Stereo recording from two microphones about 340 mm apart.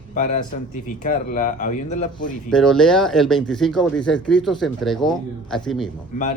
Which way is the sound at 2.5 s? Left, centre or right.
Centre.